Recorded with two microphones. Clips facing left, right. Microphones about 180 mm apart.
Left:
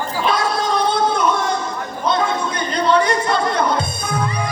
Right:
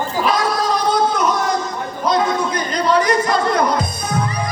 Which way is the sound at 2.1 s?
30° left (ahead or behind).